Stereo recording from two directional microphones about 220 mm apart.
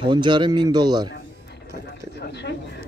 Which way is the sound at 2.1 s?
50° left (ahead or behind).